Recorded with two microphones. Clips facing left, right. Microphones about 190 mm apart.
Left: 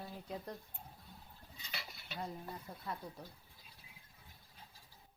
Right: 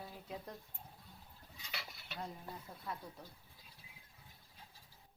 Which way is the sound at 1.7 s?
Centre (ahead or behind).